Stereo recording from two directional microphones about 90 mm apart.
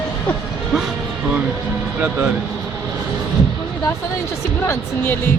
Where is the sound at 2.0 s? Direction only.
15° right (ahead or behind).